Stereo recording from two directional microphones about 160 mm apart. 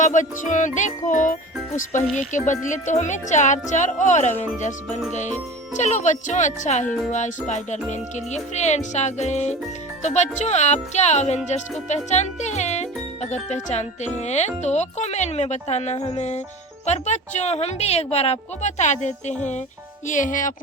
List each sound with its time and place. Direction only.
0.0 s a woman's voice: 50° left (ahead or behind)
2.5 s a woman's voice: 50° left (ahead or behind)
5.7 s a woman's voice: 50° left (ahead or behind)